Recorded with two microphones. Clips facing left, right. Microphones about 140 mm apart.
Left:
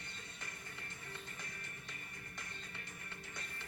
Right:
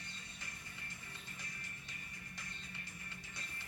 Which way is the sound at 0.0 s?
55° left (ahead or behind).